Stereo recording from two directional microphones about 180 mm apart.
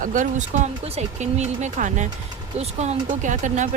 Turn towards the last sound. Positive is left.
turn(degrees=-45)  # may be behind; listen again after turning